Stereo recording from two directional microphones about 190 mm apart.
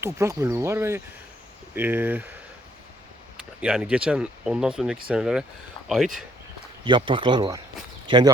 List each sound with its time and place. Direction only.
0.0 s speech: 15° right (ahead or behind)
3.6 s speech: 5° right (ahead or behind)
6.8 s speech: 25° right (ahead or behind)